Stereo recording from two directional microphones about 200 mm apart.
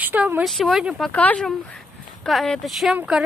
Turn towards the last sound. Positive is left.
turn(degrees=-5)  # may be behind; listen again after turning